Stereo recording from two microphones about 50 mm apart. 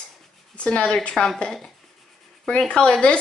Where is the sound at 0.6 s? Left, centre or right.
Left.